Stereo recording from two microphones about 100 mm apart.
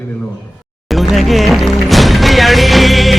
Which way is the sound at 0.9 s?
Centre (ahead or behind).